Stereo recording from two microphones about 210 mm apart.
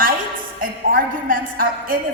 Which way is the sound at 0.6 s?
40° right (ahead or behind).